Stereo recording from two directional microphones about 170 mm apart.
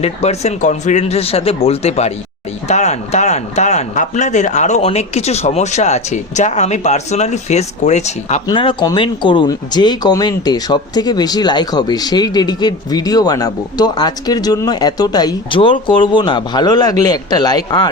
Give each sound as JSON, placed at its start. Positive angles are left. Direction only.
{"t": 0.0, "sound": "speech", "side_deg": 40}
{"t": 8.4, "sound": "speech", "side_deg": 25}